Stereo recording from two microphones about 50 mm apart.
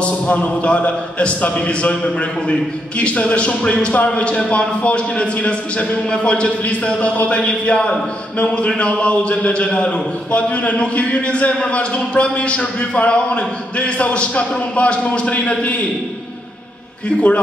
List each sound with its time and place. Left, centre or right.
0.0 s a man's voice: left
17.1 s a man's voice: left